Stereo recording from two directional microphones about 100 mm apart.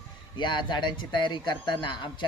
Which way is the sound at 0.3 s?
50° left (ahead or behind).